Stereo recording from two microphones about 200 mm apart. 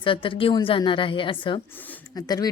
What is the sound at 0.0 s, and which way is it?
A woman's voice, 25° left (ahead or behind).